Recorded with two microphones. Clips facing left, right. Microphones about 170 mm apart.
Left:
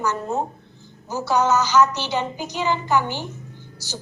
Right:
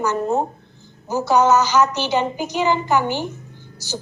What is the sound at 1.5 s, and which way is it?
A woman's voice, 15° right (ahead or behind).